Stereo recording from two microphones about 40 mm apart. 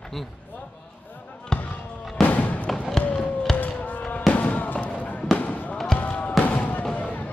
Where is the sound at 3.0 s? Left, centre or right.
Left.